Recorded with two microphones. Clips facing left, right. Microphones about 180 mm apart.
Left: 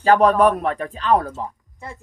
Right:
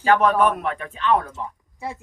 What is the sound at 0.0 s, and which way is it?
Speech, 35° left (ahead or behind).